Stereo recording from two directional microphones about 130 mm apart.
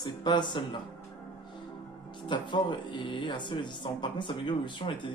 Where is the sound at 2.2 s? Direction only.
40° left (ahead or behind).